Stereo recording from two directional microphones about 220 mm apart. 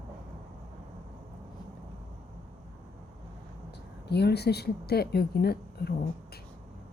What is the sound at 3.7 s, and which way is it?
Speech, 50° left (ahead or behind).